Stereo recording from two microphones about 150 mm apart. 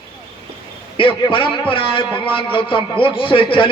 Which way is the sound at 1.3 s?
35° left (ahead or behind).